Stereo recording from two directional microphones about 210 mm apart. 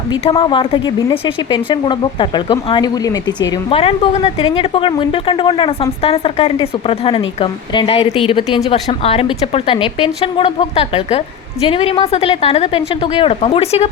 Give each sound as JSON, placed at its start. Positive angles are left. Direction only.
{"t": 0.3, "sound": "speech", "side_deg": 25}